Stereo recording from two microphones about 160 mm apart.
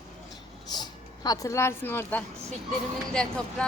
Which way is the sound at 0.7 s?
25° left (ahead or behind).